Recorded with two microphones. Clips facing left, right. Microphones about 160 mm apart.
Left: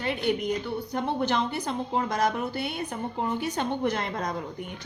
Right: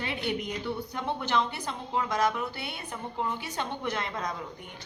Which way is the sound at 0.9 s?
40° left (ahead or behind).